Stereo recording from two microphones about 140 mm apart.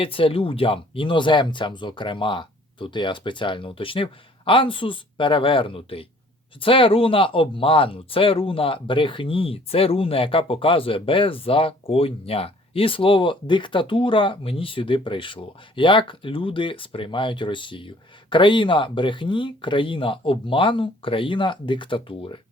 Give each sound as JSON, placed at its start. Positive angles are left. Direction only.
{"t": 0.0, "sound": "speech", "side_deg": 40}